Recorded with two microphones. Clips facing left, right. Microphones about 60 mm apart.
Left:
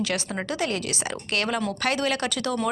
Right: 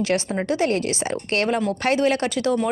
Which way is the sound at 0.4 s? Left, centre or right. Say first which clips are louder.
Right 7 dB; right.